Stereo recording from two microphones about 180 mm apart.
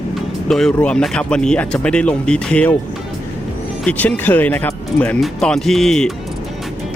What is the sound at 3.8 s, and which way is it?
Speech, 10° left (ahead or behind).